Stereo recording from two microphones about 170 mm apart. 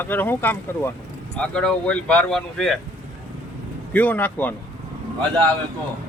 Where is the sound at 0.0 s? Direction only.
10° left (ahead or behind).